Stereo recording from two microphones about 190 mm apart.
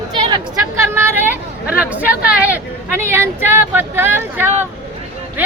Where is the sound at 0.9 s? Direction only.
10° right (ahead or behind).